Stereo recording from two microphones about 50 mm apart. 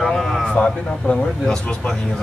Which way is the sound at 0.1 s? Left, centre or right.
Centre.